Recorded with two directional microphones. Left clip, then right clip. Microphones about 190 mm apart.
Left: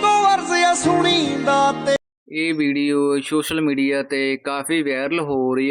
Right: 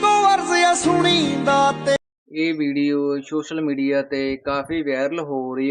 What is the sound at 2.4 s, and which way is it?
Speech, 20° left (ahead or behind).